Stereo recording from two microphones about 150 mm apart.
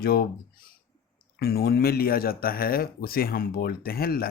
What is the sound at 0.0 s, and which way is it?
Speech, 90° left.